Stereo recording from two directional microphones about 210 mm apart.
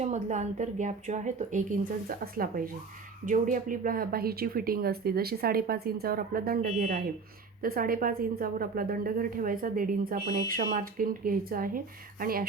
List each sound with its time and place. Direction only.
0.0 s a woman's voice: 35° right (ahead or behind)